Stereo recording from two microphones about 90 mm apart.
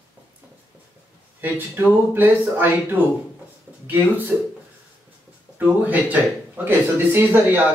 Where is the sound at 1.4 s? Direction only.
20° right (ahead or behind).